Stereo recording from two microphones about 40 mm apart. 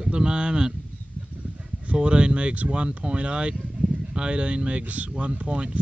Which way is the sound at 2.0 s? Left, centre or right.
Right.